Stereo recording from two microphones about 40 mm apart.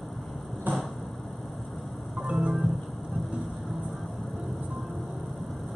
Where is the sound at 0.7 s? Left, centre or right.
Right.